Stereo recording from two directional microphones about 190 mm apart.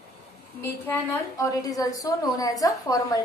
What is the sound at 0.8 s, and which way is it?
A woman's voice, 10° left (ahead or behind).